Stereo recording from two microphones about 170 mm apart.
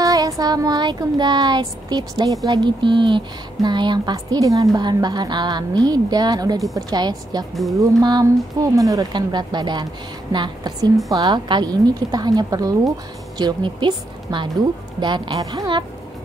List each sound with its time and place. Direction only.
0.0 s child singing: 20° right (ahead or behind)
0.4 s speech: 25° right (ahead or behind)